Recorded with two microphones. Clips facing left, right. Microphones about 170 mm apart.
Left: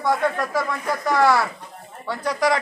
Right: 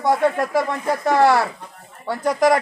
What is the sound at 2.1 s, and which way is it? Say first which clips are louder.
Speech: right 4 dB; 45° right (ahead or behind).